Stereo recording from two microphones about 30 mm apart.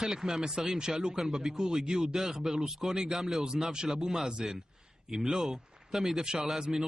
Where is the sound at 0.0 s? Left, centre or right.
Centre.